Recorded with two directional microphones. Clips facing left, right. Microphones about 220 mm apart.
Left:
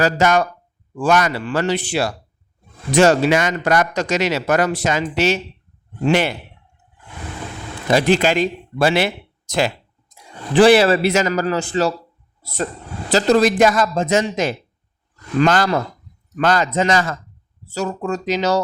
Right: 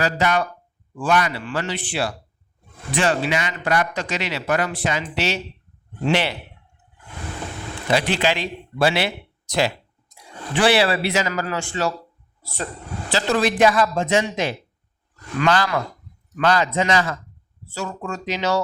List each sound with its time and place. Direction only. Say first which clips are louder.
0.0 s speech: left 5 dB; 45° left (ahead or behind)
7.9 s a man's voice: left 5 dB; 45° left (ahead or behind)